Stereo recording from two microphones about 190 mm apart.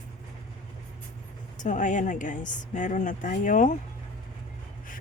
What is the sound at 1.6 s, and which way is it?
A woman's voice, 40° left (ahead or behind).